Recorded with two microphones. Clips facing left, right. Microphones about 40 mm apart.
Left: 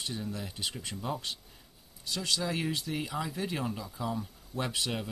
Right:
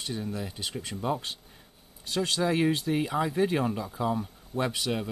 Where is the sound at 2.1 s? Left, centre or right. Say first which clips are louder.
Right 7 dB; right.